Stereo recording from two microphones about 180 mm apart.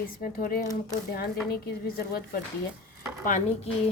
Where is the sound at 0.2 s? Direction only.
50° left (ahead or behind).